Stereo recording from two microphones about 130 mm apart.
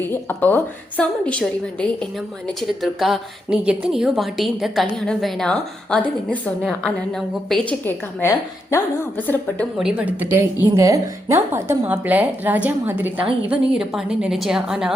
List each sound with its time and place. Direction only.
0.1 s a woman's voice: 15° left (ahead or behind)
7.9 s a woman's voice: 20° left (ahead or behind)
9.7 s speech: 5° right (ahead or behind)
13.5 s a woman's voice: 5° right (ahead or behind)